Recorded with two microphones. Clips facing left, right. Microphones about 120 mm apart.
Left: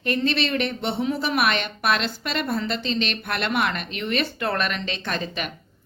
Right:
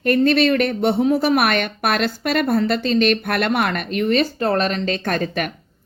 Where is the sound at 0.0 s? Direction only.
50° right (ahead or behind); by 4.9 s 35° right (ahead or behind).